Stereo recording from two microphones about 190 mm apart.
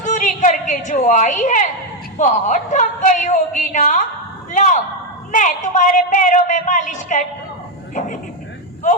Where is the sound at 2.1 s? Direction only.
40° left (ahead or behind).